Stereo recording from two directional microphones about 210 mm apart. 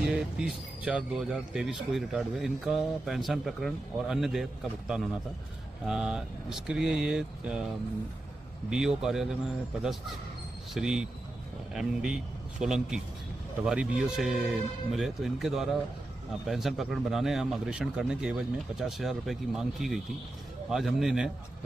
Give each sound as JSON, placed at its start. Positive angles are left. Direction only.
{"t": 0.0, "sound": "a sound", "side_deg": -5}
{"t": 0.8, "sound": "speech", "side_deg": -5}
{"t": 8.6, "sound": "speech", "side_deg": 0}
{"t": 10.7, "sound": "speech", "side_deg": 0}